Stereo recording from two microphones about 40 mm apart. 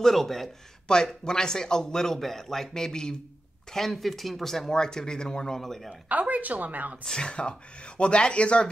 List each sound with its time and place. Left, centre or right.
0.0 s speech: centre
0.8 s a man's voice: centre
3.7 s a man's voice: centre
5.6 s a man's voice: centre
6.0 s a woman's voice: right
7.1 s speech: left